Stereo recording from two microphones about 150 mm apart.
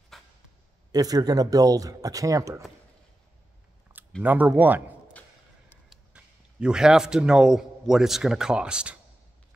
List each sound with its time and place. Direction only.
0.1 s a sound: centre (ahead or behind)
0.9 s speech: 25° right (ahead or behind)
4.2 s speech: 10° right (ahead or behind)
5.9 s a man's voice: 5° right (ahead or behind)